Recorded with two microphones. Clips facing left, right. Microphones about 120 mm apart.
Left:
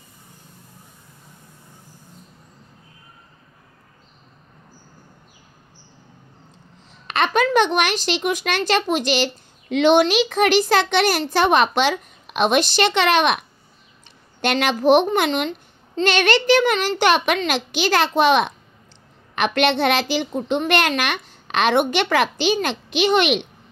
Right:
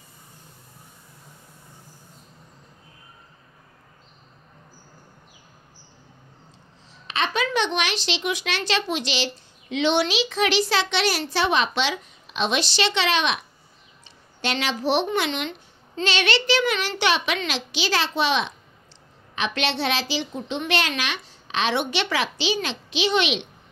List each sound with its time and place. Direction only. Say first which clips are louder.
7.1 s a woman's voice: left 6 dB; 55° left (ahead or behind)